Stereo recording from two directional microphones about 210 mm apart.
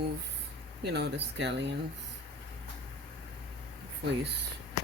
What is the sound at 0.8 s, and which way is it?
Speech, 50° right (ahead or behind).